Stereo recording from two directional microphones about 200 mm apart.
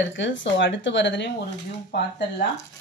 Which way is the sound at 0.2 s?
65° left (ahead or behind).